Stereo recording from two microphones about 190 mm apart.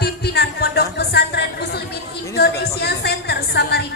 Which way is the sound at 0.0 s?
60° left (ahead or behind).